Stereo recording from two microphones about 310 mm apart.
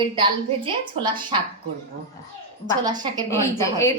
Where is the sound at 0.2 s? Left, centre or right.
Centre.